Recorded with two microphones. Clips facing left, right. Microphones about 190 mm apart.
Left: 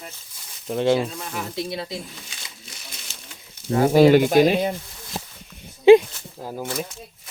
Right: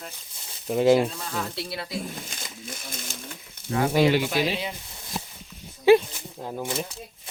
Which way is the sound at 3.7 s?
30° left (ahead or behind).